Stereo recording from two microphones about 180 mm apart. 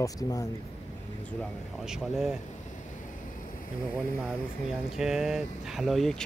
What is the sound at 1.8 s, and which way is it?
Speech, centre (ahead or behind).